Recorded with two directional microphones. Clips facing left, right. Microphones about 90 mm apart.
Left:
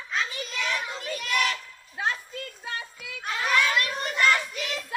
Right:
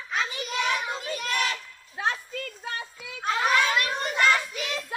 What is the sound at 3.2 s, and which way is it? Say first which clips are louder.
Children playing: right 2 dB; 25° right (ahead or behind).